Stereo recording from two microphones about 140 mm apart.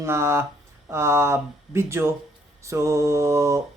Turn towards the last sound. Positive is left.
turn(degrees=-20)  # may be behind; listen again after turning